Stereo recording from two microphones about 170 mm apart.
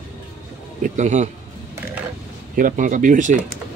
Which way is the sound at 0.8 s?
45° right (ahead or behind).